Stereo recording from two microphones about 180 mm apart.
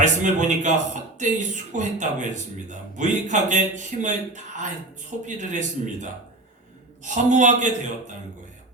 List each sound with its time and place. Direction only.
0.0 s speech: 45° right (ahead or behind)